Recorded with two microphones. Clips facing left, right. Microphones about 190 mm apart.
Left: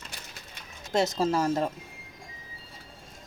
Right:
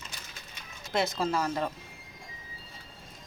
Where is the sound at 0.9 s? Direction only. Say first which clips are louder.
Left 4 dB; 40° left (ahead or behind).